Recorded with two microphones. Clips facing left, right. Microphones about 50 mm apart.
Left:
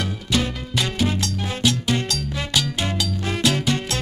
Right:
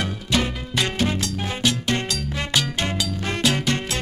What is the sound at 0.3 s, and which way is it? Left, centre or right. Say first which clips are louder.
Music: even; centre.